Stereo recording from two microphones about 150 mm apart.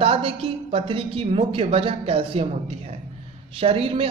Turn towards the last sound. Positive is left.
turn(degrees=-40)  # may be behind; listen again after turning